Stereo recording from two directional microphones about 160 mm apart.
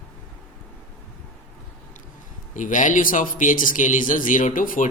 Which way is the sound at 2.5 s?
55° left (ahead or behind).